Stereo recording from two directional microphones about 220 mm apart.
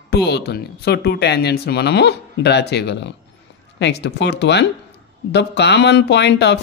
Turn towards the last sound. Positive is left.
turn(degrees=50)  # may be behind; listen again after turning